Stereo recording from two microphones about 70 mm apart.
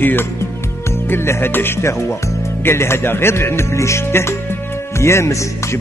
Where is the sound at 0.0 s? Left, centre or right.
Left.